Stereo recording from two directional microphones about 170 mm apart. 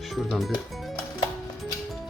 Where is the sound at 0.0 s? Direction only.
Centre (ahead or behind).